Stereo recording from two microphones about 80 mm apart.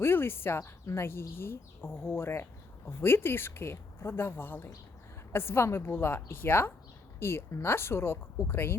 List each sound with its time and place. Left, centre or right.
0.0 s speech: left